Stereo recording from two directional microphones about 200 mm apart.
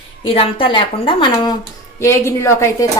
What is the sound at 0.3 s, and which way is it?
A woman's voice, 25° left (ahead or behind).